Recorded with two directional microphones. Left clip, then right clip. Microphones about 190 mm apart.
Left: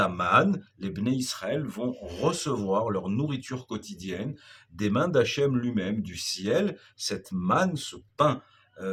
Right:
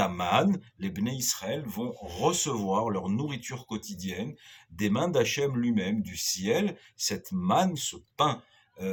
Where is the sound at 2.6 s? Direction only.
5° left (ahead or behind).